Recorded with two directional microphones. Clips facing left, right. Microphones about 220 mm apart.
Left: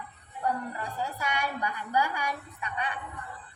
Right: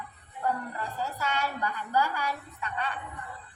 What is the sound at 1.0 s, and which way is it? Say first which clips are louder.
A woman's voice: right 1 dB; 15° left (ahead or behind).